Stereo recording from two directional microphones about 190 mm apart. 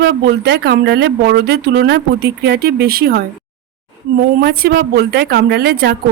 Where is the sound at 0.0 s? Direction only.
60° right (ahead or behind).